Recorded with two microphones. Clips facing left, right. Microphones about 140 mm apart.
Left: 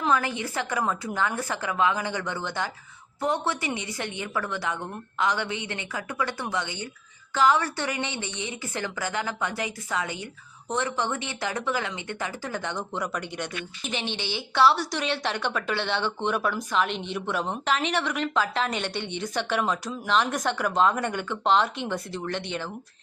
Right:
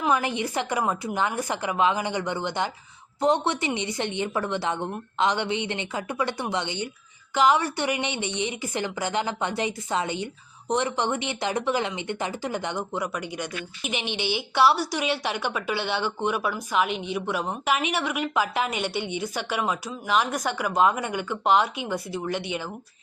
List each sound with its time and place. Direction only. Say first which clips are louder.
0.0 s a woman's voice: right 1 dB; 15° right (ahead or behind)
13.0 s speech: right 1 dB; 5° right (ahead or behind)